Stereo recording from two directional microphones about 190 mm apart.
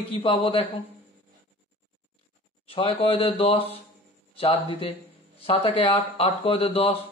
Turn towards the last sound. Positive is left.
turn(degrees=30)  # may be behind; listen again after turning